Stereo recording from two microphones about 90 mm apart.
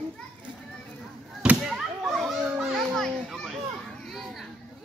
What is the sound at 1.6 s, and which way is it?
Children playing, 5° right (ahead or behind).